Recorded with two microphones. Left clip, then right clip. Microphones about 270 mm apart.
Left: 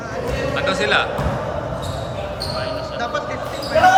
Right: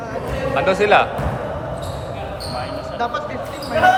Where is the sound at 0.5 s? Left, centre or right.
Right.